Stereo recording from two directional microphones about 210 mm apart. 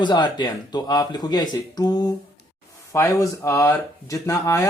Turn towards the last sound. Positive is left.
turn(degrees=15)  # may be behind; listen again after turning